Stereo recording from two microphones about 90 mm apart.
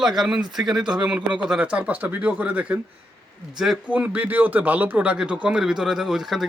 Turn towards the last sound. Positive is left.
turn(degrees=-5)  # may be behind; listen again after turning